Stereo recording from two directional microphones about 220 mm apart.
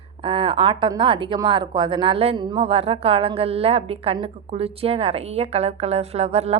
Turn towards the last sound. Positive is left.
turn(degrees=-30)  # may be behind; listen again after turning